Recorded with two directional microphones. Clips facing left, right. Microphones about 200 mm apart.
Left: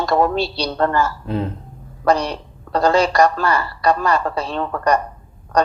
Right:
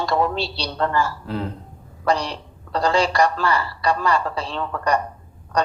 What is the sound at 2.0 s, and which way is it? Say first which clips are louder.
A woman's voice: left 4 dB; 45° left (ahead or behind).